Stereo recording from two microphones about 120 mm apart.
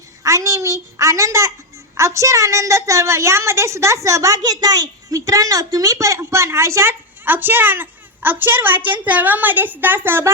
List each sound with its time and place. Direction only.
0.2 s a woman's voice: 25° right (ahead or behind)